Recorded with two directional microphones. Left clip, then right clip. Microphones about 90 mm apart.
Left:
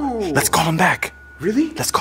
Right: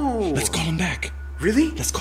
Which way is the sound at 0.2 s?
40° left (ahead or behind).